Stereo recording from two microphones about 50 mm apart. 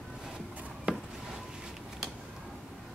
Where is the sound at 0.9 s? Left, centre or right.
Right.